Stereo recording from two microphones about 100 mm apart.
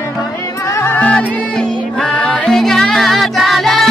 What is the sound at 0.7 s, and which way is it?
Music, 25° left (ahead or behind).